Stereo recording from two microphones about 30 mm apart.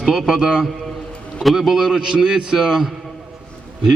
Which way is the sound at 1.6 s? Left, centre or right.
Centre.